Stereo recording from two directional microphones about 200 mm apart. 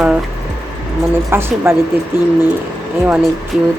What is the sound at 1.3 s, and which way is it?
Speech, 10° right (ahead or behind).